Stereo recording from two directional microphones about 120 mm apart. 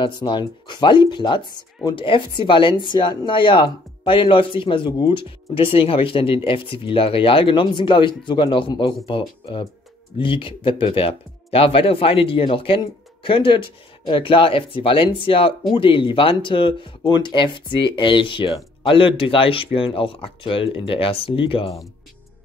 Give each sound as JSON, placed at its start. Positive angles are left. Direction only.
{"t": 0.0, "sound": "speech", "side_deg": 40}